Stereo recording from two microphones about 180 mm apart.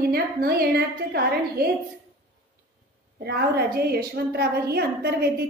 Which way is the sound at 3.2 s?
60° right (ahead or behind).